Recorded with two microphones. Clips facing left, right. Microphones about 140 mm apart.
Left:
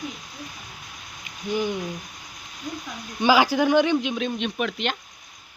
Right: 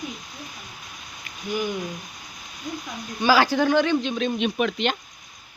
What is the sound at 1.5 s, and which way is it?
Speech, 25° left (ahead or behind).